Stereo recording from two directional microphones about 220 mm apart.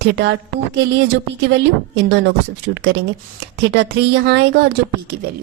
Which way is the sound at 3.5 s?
50° right (ahead or behind).